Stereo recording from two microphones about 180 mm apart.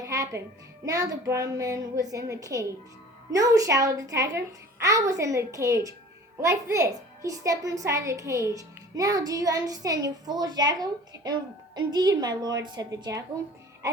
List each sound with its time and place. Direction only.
0.0 s music: 20° right (ahead or behind)
0.9 s a child's voice: 15° right (ahead or behind)